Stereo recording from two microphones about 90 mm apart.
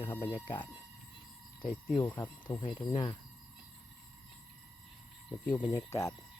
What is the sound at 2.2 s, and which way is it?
Speech, 50° left (ahead or behind).